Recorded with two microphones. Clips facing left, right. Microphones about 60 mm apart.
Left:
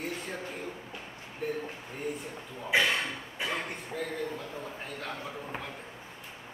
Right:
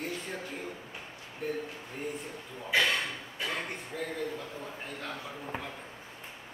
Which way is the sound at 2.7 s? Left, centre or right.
Centre.